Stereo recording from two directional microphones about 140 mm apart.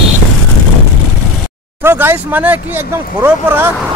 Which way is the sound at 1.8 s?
15° right (ahead or behind).